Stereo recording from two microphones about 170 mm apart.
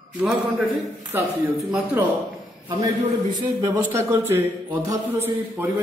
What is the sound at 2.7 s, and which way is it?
A man's voice, 20° right (ahead or behind).